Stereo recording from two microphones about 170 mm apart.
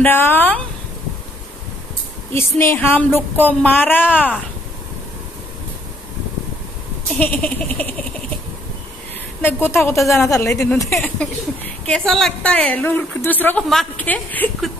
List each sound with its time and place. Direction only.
0.0 s a woman's voice: 10° left (ahead or behind)
2.3 s a woman's voice: 15° left (ahead or behind)
7.2 s a woman's voice: 10° left (ahead or behind)
9.4 s a woman's voice: 10° left (ahead or behind)
10.9 s a woman's voice: centre (ahead or behind)